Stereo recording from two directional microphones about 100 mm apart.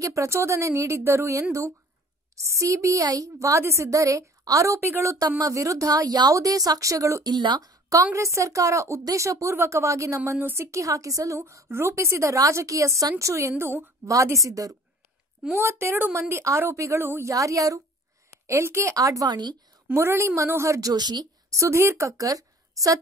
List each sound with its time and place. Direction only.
0.0 s a woman's voice: 30° right (ahead or behind)
7.2 s a woman's voice: 45° right (ahead or behind)
19.9 s speech: 25° right (ahead or behind)
20.9 s speech: 45° right (ahead or behind)
21.5 s a woman's voice: 25° right (ahead or behind)